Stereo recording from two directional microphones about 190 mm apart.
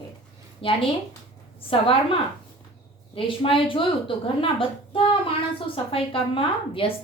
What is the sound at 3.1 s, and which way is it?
A woman's voice, 30° left (ahead or behind).